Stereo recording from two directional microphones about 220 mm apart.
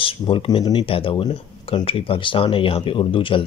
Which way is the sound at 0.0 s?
25° left (ahead or behind).